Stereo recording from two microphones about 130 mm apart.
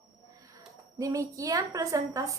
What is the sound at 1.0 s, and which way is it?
A woman's voice, 25° right (ahead or behind).